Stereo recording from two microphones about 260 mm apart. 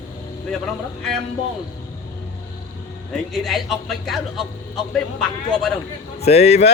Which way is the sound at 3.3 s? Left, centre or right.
Centre.